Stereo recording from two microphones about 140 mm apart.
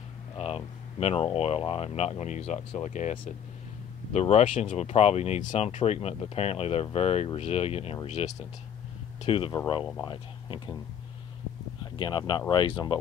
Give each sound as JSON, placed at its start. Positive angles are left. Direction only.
{"t": 0.4, "sound": "speech", "side_deg": 45}
{"t": 9.2, "sound": "speech", "side_deg": 40}
{"t": 9.8, "sound": "speech", "side_deg": 25}
{"t": 11.8, "sound": "speech", "side_deg": 30}